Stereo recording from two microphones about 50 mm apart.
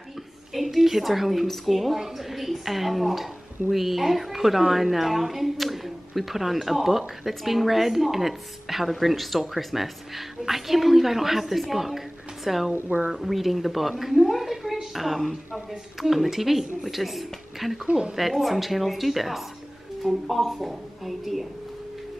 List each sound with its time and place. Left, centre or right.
0.5 s a woman's voice: centre
12.8 s speech: right
13.1 s a woman's voice: centre